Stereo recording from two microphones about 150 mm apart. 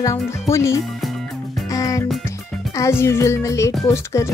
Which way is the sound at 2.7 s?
15° left (ahead or behind).